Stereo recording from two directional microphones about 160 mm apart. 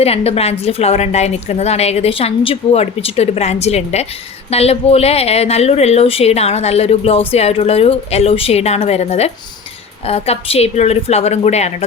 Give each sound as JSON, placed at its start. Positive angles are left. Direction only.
{"t": 0.0, "sound": "a woman's voice", "side_deg": 40}